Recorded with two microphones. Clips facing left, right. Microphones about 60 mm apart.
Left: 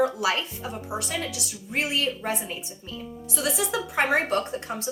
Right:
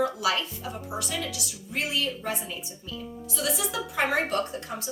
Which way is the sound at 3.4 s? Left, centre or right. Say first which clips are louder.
Left 2 dB; left.